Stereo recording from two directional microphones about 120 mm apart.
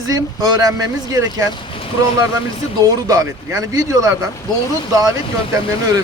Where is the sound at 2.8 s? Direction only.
30° right (ahead or behind).